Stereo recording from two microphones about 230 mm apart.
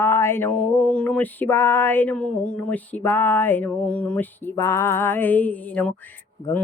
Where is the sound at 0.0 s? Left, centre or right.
Centre.